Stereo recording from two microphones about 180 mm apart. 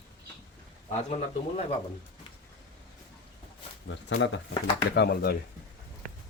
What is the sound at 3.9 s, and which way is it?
Speech, 80° left.